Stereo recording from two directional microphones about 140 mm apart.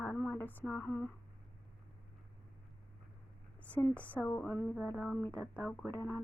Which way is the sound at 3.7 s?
10° left (ahead or behind).